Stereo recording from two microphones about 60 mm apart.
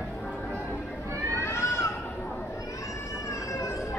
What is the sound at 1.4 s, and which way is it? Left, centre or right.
Children playing, left.